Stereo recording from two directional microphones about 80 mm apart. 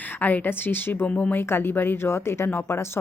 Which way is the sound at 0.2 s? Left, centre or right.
Left.